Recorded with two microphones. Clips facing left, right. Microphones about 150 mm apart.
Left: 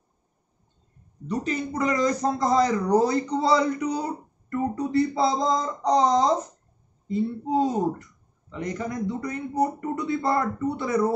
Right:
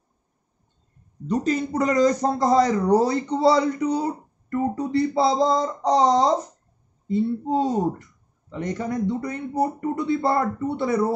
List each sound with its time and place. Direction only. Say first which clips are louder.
1.3 s speech: right 5 dB; 35° right (ahead or behind)